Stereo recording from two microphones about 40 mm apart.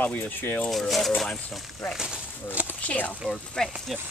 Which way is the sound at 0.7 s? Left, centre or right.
Centre.